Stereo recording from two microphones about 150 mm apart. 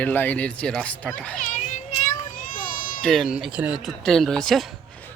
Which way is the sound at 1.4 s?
55° left (ahead or behind).